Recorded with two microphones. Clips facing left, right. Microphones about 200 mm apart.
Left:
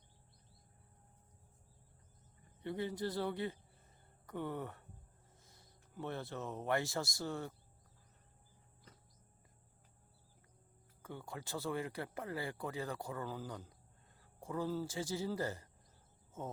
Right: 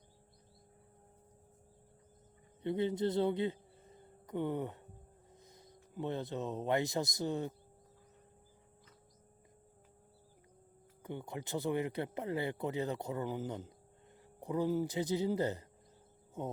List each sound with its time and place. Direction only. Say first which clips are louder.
2.6 s speech: right 6 dB; 20° right (ahead or behind)
11.0 s speech: right 5 dB; 20° right (ahead or behind)
16.4 s music: right 5 dB; 15° right (ahead or behind)